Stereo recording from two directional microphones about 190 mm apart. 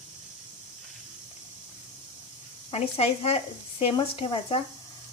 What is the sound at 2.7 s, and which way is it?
Speech, 30° left (ahead or behind).